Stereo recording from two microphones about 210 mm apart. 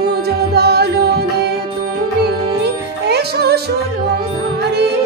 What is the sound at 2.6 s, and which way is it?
Music, 50° right (ahead or behind).